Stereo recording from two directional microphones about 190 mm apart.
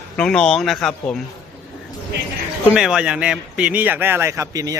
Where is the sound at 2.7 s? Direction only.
5° right (ahead or behind).